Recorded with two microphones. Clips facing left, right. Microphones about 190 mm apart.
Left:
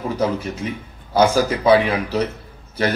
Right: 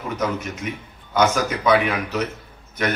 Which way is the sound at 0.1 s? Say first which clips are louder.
Left 2 dB; 30° left (ahead or behind).